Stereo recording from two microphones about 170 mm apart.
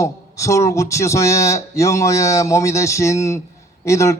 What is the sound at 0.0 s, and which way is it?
A man's voice, 20° left (ahead or behind).